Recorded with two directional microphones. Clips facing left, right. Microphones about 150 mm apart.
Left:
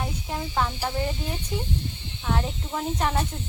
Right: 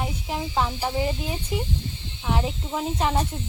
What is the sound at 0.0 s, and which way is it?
Snake, 15° right (ahead or behind).